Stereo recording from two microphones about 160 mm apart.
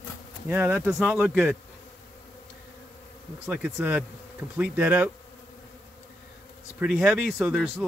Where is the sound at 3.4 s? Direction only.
5° right (ahead or behind).